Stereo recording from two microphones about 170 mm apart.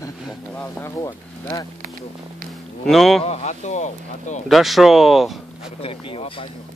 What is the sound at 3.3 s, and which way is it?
Speech, 40° left (ahead or behind).